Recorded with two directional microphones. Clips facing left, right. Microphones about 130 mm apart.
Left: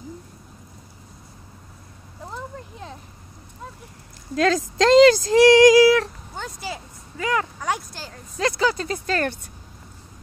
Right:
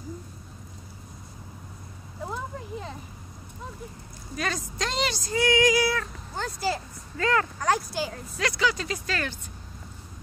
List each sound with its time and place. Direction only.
2.2 s a sound: centre (ahead or behind)
4.4 s speech: 90° left
6.3 s speech: centre (ahead or behind)
7.2 s speech: 15° left (ahead or behind)
7.9 s speech: 10° right (ahead or behind)
8.4 s speech: 35° left (ahead or behind)